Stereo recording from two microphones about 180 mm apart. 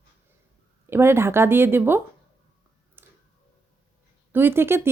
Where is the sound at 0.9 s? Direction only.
15° right (ahead or behind).